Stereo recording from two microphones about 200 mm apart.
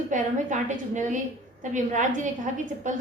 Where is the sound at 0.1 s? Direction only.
40° right (ahead or behind).